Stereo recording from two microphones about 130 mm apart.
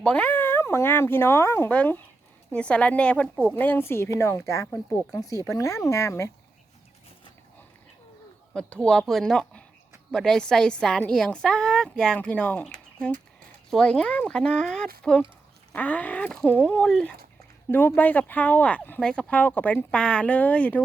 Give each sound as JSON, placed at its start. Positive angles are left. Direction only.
{"t": 0.0, "sound": "speech", "side_deg": 10}
{"t": 8.5, "sound": "a woman's voice", "side_deg": 5}
{"t": 17.7, "sound": "speech", "side_deg": 15}